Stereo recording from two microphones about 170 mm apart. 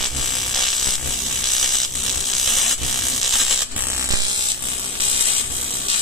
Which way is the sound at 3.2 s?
Centre (ahead or behind).